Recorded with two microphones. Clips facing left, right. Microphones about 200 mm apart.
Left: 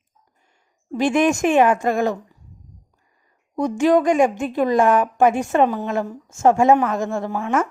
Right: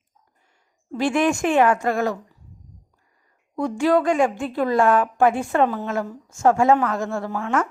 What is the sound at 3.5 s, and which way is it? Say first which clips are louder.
A woman's voice: left 3 dB; 20° left (ahead or behind).